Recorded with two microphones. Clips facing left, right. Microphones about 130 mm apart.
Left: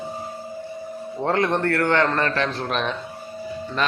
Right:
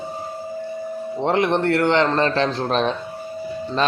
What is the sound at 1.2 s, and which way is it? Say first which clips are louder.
A man's voice: right 2 dB; 20° right (ahead or behind).